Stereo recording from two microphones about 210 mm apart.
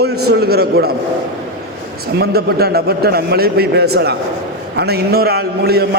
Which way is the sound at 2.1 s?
50° right (ahead or behind).